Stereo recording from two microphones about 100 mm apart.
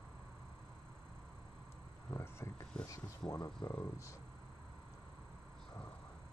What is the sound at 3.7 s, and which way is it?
Speech, 25° left (ahead or behind).